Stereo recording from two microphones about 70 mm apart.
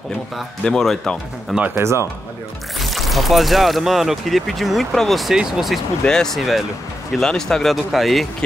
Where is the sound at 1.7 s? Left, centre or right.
Right.